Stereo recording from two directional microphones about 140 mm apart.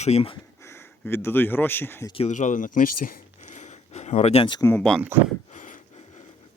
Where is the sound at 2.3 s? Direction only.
65° left (ahead or behind); by 4.6 s 40° left (ahead or behind).